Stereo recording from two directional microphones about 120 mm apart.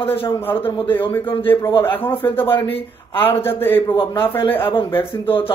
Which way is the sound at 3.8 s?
40° left (ahead or behind).